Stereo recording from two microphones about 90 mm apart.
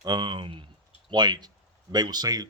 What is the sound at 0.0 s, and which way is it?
A man's voice, 50° right (ahead or behind).